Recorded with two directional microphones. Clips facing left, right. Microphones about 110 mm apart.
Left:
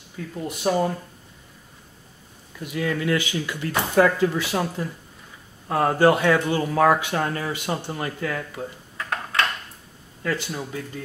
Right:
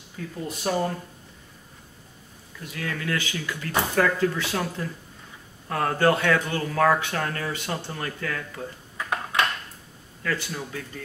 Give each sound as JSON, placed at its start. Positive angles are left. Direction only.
{"t": 0.5, "sound": "speech", "side_deg": 15}
{"t": 2.6, "sound": "speech", "side_deg": 15}
{"t": 8.9, "sound": "a sound", "side_deg": -15}
{"t": 10.2, "sound": "speech", "side_deg": 20}